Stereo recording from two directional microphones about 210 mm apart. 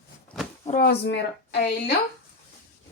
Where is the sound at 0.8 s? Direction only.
50° left (ahead or behind).